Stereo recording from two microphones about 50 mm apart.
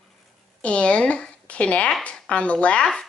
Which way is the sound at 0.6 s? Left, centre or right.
Left.